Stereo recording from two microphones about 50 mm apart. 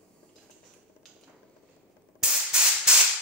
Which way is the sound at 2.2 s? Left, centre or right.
Centre.